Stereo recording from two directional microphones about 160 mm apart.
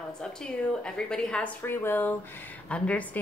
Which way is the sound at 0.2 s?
5° left (ahead or behind).